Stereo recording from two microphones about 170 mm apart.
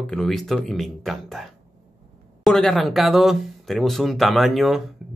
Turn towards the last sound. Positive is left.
turn(degrees=0)  # may be behind; listen again after turning